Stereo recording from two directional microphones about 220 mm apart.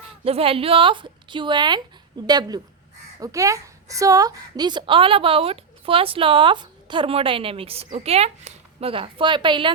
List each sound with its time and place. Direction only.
0.3 s a woman's voice: 25° right (ahead or behind)